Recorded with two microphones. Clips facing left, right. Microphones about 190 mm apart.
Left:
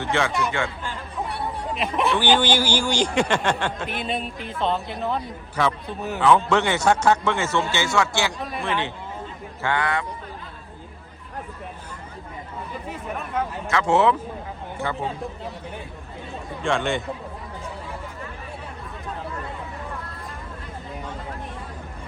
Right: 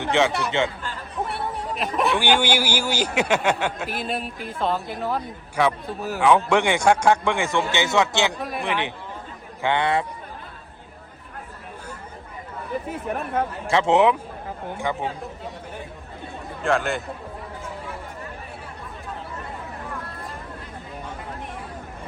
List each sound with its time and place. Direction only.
0.0 s a man's voice: 15° right (ahead or behind)
1.4 s a sound: centre (ahead or behind)
2.1 s a man's voice: 10° right (ahead or behind); by 10.1 s 30° right (ahead or behind)
13.7 s speech: 30° right (ahead or behind)
13.9 s a man's voice: 15° right (ahead or behind)
16.6 s a man's voice: centre (ahead or behind)